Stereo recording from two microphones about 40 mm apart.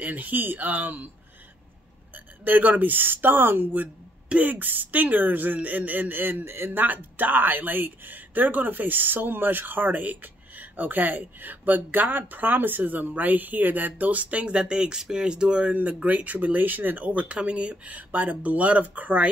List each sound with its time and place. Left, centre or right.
0.0 s speech: right
2.1 s speech: right
4.4 s speech: right
15.7 s speech: right